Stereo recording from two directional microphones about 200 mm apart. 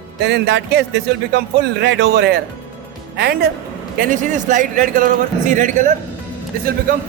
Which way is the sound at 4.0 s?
40° right (ahead or behind).